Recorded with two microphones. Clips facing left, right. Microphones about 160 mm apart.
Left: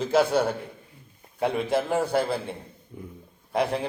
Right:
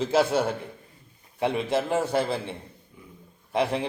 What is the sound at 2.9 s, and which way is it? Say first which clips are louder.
Speech: left 12 dB; 45° left (ahead or behind).